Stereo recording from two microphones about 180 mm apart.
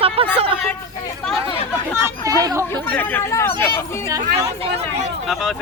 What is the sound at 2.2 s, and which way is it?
Speech, 20° right (ahead or behind).